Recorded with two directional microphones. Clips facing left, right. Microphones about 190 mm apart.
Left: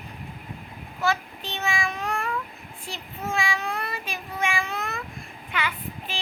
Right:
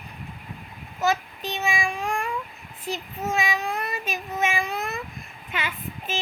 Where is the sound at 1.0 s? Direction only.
15° right (ahead or behind).